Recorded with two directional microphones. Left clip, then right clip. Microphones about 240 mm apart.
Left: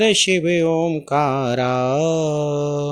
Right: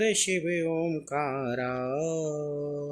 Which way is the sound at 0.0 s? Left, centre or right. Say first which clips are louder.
Left 10 dB; left.